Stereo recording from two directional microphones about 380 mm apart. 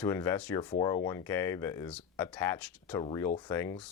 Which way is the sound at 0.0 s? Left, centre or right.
Centre.